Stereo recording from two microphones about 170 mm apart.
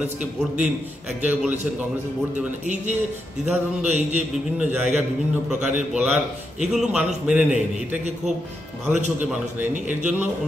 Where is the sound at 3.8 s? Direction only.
45° right (ahead or behind).